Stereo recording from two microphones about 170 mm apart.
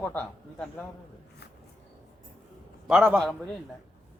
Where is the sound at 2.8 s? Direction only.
5° right (ahead or behind).